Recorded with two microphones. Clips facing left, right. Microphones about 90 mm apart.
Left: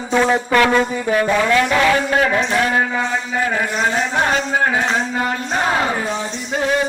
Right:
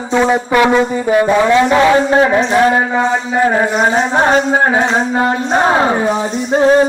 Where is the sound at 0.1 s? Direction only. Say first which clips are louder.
Right 3 dB; 15° right (ahead or behind).